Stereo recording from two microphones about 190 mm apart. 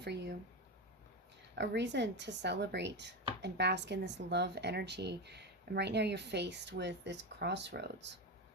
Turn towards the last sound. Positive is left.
turn(degrees=-65)  # may be behind; listen again after turning